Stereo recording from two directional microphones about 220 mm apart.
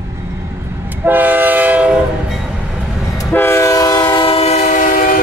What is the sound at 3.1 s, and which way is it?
Train, 15° left (ahead or behind).